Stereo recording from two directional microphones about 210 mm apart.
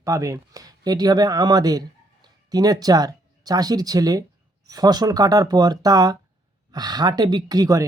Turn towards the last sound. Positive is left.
turn(degrees=-15)  # may be behind; listen again after turning